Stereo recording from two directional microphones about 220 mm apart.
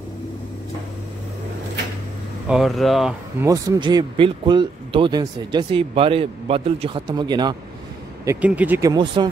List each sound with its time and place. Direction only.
2.4 s speech: centre (ahead or behind)
3.4 s speech: 15° right (ahead or behind)
8.3 s speech: 5° right (ahead or behind)